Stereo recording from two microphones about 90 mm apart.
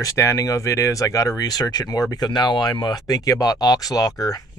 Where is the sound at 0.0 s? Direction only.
35° left (ahead or behind).